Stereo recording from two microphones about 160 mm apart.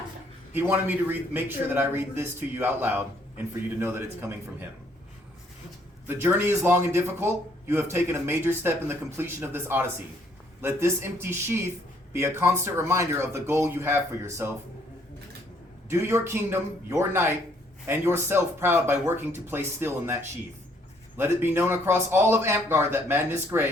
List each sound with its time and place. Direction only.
0.5 s a man's voice: 10° right (ahead or behind)
6.1 s a man's voice: 15° right (ahead or behind)
15.9 s a man's voice: 15° right (ahead or behind)
21.2 s a man's voice: 15° right (ahead or behind)